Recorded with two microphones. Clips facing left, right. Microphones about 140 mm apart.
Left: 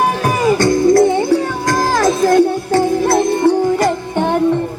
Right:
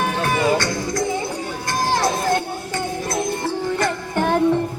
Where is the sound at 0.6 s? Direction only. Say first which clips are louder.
Left 13 dB; 65° left (ahead or behind).